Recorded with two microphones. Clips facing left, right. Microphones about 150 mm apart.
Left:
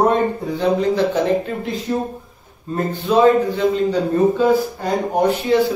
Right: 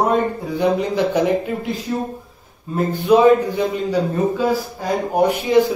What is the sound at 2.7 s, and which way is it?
A man's voice, 15° right (ahead or behind).